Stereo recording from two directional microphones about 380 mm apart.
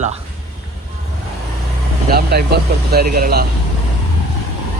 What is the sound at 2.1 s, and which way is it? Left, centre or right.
Speech, right.